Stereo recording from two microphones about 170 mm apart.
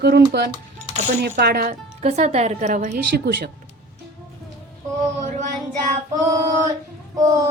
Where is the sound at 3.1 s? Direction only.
70° right (ahead or behind).